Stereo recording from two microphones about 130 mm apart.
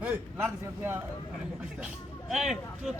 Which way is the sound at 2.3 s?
5° right (ahead or behind).